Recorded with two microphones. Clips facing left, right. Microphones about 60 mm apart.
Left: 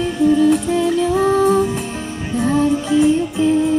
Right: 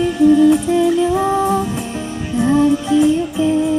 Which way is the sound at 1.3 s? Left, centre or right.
Centre.